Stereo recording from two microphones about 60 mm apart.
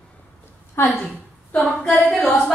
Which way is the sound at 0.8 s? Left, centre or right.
Left.